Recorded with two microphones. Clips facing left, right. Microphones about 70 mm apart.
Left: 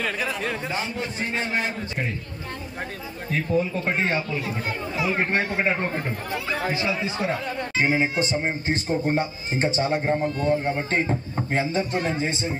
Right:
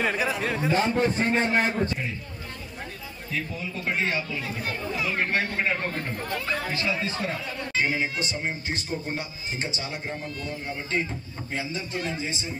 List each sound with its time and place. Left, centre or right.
0.0 s speech: centre
0.3 s speech: centre
0.7 s a man's voice: right
3.3 s speech: left; by 7.3 s centre
7.7 s speech: left